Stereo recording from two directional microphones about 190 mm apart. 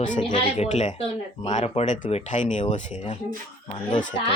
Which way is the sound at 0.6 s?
35° left (ahead or behind).